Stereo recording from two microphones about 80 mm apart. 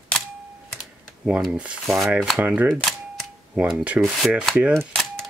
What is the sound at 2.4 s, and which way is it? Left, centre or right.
Speech, right.